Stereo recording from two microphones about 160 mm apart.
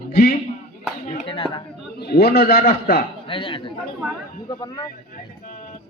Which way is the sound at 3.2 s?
35° left (ahead or behind).